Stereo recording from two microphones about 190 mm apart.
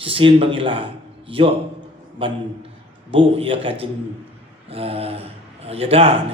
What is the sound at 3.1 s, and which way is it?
A man's voice, 30° right (ahead or behind).